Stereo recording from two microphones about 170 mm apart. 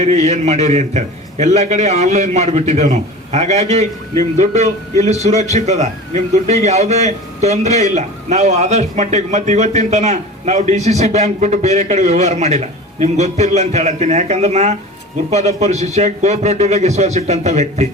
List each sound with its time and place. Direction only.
0.0 s a man's voice: 40° right (ahead or behind)